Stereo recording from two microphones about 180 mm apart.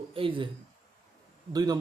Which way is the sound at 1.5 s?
20° right (ahead or behind).